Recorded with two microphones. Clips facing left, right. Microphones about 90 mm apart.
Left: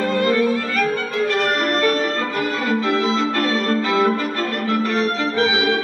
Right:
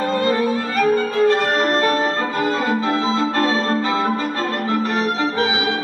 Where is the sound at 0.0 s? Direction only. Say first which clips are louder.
Left 1 dB; 40° right (ahead or behind).